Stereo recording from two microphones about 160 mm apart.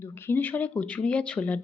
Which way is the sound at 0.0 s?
15° left (ahead or behind).